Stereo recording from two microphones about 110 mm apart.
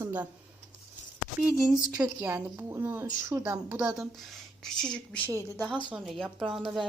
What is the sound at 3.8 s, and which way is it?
Speech, 5° right (ahead or behind).